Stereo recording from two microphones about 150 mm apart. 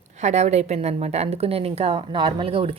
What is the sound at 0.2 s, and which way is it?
A woman's voice, 50° right (ahead or behind).